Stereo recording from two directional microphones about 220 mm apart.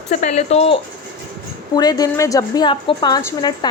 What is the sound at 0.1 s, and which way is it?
Speech, 30° left (ahead or behind).